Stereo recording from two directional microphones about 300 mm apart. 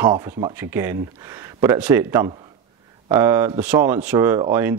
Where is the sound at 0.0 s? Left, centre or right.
Centre.